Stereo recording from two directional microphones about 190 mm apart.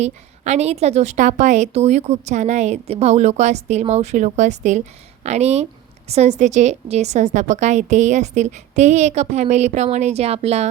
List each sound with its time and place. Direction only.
0.0 s a woman's voice: 35° right (ahead or behind)